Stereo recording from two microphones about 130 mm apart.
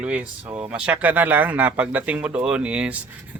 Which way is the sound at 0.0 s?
10° right (ahead or behind).